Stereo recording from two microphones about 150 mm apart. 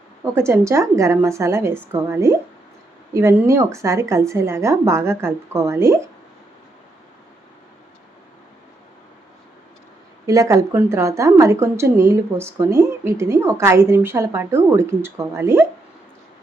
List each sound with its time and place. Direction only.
0.3 s a woman's voice: 15° right (ahead or behind)
10.2 s a woman's voice: 20° right (ahead or behind)